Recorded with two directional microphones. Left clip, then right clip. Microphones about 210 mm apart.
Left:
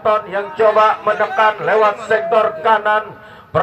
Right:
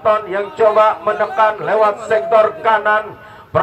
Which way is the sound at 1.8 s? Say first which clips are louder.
Even; 55° right (ahead or behind).